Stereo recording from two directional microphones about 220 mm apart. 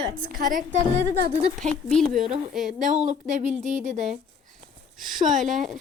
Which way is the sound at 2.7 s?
35° right (ahead or behind).